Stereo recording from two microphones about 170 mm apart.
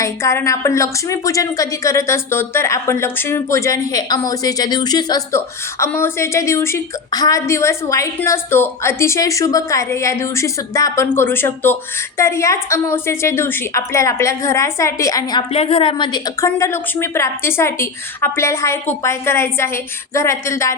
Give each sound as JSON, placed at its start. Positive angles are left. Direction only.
{"t": 0.0, "sound": "a woman's voice", "side_deg": 15}